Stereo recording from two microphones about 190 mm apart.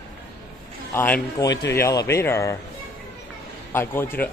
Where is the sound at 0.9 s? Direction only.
10° left (ahead or behind).